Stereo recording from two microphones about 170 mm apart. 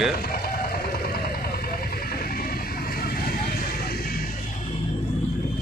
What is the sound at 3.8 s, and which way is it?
Music, 60° left (ahead or behind).